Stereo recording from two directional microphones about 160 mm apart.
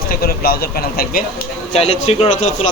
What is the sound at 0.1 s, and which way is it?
Speech, 65° left (ahead or behind).